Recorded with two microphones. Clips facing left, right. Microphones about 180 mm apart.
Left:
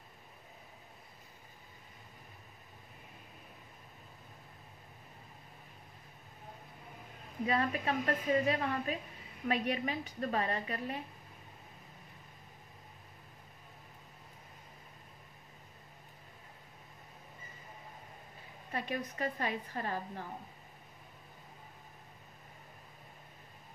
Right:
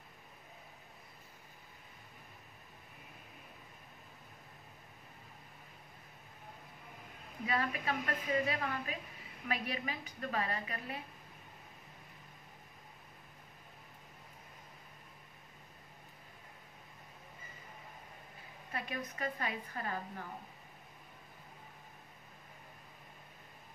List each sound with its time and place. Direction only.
7.4 s speech: 30° left (ahead or behind)
18.7 s speech: 30° left (ahead or behind)